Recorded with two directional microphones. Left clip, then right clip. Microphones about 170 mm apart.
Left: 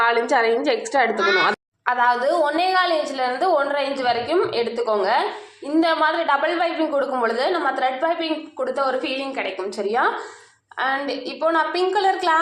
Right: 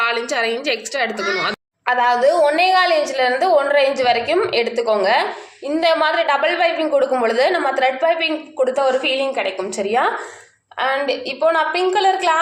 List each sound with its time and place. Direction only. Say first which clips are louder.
0.0 s a woman's voice: left 1 dB; 5° left (ahead or behind)
1.9 s a woman's voice: right 4 dB; 30° left (ahead or behind)